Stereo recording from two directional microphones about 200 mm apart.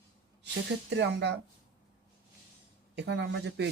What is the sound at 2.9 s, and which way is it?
Speech, 60° right (ahead or behind).